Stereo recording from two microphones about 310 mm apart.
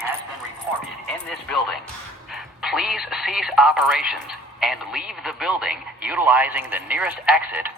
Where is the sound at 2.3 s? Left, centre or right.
Centre.